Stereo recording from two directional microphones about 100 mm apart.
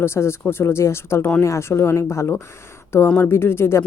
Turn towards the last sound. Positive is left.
turn(degrees=25)  # may be behind; listen again after turning